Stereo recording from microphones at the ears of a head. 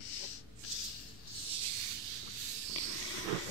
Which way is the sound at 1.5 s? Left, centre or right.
Right.